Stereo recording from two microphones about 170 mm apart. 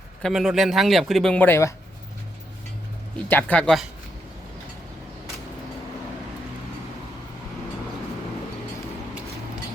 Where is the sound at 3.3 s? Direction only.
10° left (ahead or behind).